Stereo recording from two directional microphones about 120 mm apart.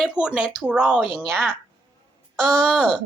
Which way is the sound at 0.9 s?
5° left (ahead or behind).